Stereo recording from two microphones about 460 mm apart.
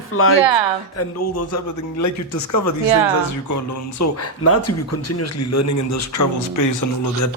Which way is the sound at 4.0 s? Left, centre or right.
Left.